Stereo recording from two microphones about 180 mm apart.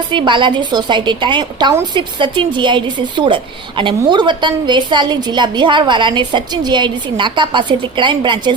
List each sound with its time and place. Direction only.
0.1 s a woman's voice: 25° right (ahead or behind)